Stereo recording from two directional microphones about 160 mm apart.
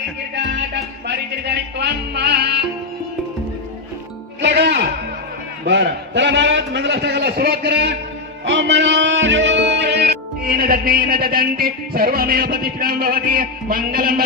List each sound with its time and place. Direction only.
1.0 s music: 90° right
4.4 s music: 90° right
5.6 s a sound: 90° right
8.5 s music: 90° right; by 14.3 s 65° right (ahead or behind)